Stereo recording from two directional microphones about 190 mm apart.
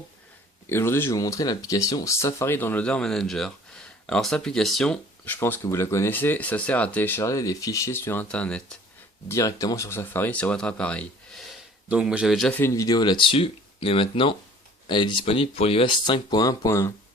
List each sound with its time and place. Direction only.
0.7 s speech: 15° left (ahead or behind)
9.3 s speech: 15° left (ahead or behind)
11.9 s speech: 5° right (ahead or behind); by 16.9 s 15° left (ahead or behind)